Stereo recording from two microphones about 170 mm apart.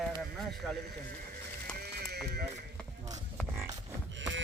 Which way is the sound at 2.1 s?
75° right (ahead or behind).